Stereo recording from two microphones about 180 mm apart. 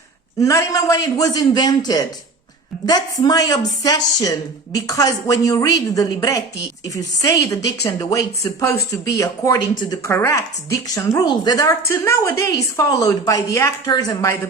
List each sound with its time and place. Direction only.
0.3 s speech: 15° left (ahead or behind)